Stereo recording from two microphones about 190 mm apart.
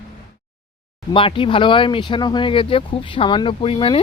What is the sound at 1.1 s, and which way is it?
Speech, 25° left (ahead or behind).